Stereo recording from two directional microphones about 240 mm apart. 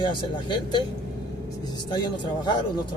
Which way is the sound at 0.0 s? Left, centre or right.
Centre.